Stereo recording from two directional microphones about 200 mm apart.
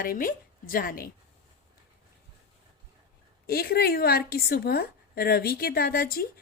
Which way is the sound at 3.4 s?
50° left (ahead or behind).